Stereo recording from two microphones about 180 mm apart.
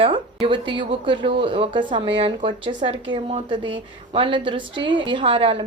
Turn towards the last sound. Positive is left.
turn(degrees=-30)  # may be behind; listen again after turning